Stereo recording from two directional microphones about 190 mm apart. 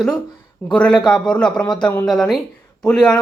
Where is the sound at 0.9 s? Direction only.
25° left (ahead or behind).